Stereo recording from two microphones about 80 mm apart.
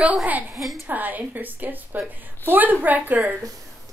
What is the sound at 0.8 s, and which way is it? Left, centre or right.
A woman's voice, right.